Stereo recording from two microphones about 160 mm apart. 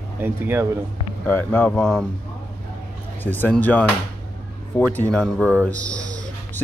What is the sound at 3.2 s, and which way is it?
Speech, 10° left (ahead or behind).